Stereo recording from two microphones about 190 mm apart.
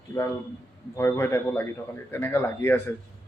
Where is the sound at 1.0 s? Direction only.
10° left (ahead or behind).